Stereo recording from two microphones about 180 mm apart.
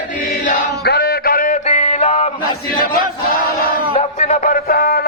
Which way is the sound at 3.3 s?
55° left (ahead or behind).